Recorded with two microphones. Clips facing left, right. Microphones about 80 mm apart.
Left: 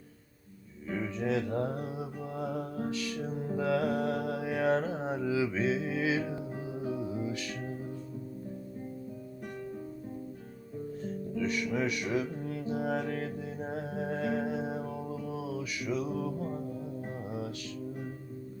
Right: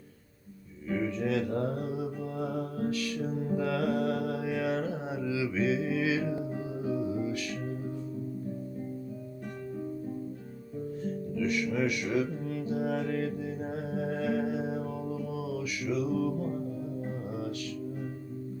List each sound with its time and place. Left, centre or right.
0.9 s music: left
3.6 s mantra: left
11.3 s music: left